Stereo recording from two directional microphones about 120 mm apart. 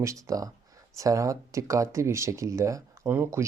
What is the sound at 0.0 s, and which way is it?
Speech, 25° right (ahead or behind).